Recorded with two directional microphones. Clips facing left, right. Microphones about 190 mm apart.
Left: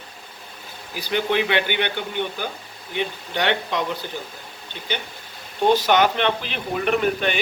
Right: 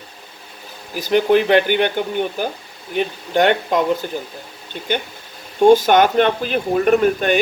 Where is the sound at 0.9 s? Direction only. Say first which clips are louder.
Right 8 dB; 45° right (ahead or behind).